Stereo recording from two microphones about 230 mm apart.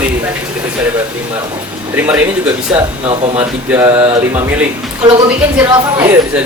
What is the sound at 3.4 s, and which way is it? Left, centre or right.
Speech, centre.